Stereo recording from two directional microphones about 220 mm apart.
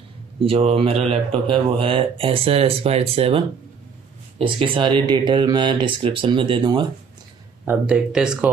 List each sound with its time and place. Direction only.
0.4 s speech: 25° right (ahead or behind)
7.6 s speech: 5° right (ahead or behind)